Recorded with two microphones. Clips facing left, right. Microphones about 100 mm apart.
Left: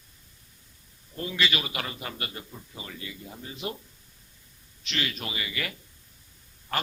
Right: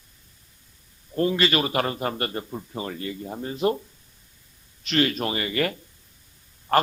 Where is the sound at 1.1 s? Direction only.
45° right (ahead or behind).